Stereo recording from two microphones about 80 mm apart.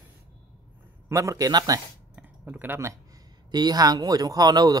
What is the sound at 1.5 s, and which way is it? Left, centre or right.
Speech, right.